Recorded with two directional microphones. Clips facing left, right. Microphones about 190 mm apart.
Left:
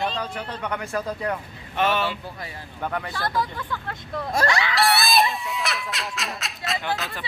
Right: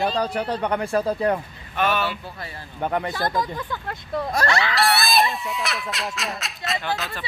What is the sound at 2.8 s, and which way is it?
Speech, 25° right (ahead or behind).